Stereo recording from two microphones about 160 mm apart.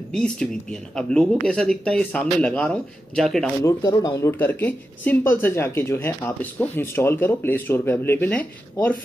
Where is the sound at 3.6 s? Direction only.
20° left (ahead or behind).